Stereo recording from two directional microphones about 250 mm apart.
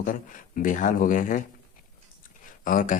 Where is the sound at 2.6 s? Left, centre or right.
Left.